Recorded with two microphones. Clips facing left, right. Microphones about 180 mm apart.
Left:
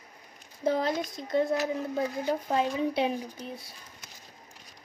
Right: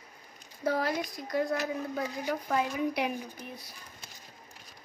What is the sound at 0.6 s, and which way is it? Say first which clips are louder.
Speech: left 2 dB; 20° left (ahead or behind).